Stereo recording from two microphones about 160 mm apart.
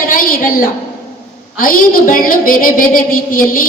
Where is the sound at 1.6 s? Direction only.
60° left (ahead or behind).